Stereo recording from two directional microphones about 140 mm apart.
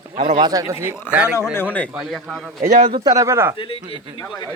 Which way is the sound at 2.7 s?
70° right (ahead or behind).